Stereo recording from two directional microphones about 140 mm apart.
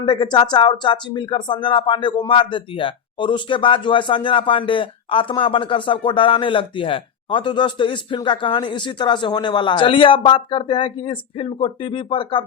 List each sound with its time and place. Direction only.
0.0 s speech: 30° left (ahead or behind)